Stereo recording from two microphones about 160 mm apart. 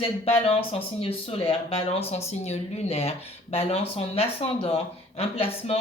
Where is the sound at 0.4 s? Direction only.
35° left (ahead or behind).